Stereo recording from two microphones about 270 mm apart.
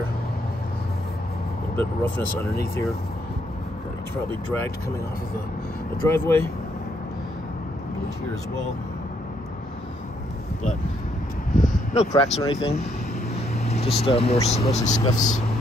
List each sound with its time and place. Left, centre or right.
2.0 s speech: centre
6.0 s speech: centre
11.6 s a sound: left
12.1 s speech: left
15.0 s speech: centre